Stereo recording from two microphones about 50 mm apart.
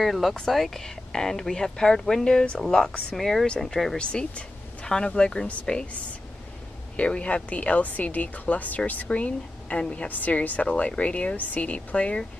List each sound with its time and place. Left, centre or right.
0.0 s speech: centre
4.0 s speech: centre
7.0 s speech: left